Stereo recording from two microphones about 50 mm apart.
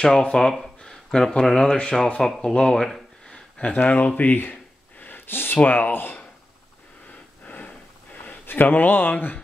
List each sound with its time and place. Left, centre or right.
0.0 s speech: centre
3.3 s a sound: left
3.8 s speech: left
4.2 s a sound: left
5.6 s speech: left
7.1 s sniff: left